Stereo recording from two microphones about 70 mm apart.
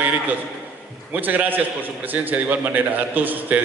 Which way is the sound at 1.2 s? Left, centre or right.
Right.